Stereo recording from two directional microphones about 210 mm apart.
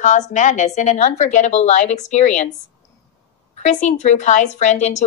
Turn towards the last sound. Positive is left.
turn(degrees=35)  # may be behind; listen again after turning